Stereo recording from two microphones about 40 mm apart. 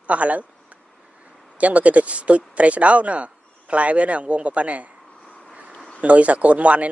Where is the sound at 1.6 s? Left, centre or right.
Right.